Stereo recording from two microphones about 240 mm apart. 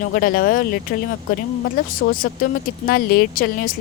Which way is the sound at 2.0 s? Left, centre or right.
Left.